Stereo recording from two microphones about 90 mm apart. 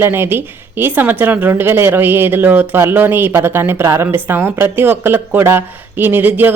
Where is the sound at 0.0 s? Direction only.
25° right (ahead or behind).